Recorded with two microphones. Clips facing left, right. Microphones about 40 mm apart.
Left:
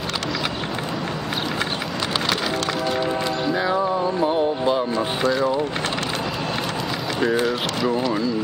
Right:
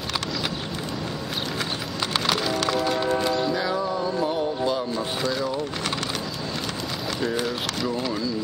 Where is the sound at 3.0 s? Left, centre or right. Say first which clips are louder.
Even; centre.